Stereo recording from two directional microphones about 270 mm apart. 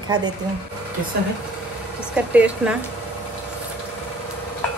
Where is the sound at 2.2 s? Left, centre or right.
Centre.